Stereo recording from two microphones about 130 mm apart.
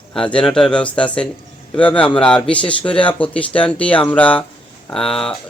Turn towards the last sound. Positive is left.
turn(degrees=5)  # may be behind; listen again after turning